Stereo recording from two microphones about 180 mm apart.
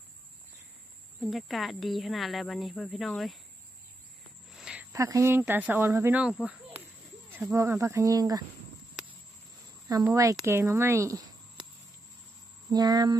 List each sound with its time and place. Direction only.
1.2 s speech: centre (ahead or behind)
4.5 s speech: 5° right (ahead or behind)
10.4 s speech: 15° right (ahead or behind)
12.7 s a sound: 20° right (ahead or behind)